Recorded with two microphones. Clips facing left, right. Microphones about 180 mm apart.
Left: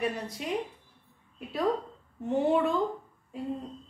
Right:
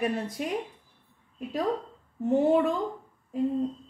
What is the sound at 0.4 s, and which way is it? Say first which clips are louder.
Speech: even; 50° right (ahead or behind).